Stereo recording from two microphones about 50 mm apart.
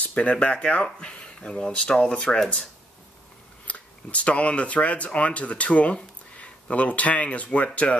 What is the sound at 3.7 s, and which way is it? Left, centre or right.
Speech, left.